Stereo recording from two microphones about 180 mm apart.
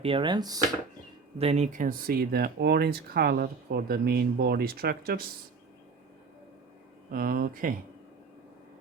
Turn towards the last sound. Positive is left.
turn(degrees=-50)  # may be behind; listen again after turning